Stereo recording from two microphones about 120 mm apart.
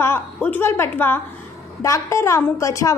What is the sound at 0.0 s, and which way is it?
A woman's voice, 15° left (ahead or behind).